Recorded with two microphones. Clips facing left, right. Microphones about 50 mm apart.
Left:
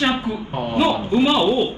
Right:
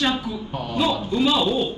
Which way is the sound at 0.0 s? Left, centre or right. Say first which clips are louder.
Left 3 dB; left.